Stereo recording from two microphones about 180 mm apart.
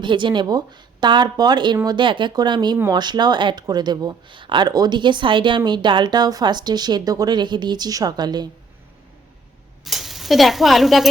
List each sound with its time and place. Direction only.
0.0 s speech: 25° right (ahead or behind)
9.8 s speech: centre (ahead or behind)